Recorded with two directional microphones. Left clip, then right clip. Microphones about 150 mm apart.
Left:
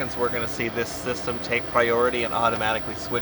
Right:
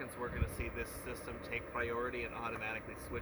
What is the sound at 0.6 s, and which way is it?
Speech, 30° left (ahead or behind).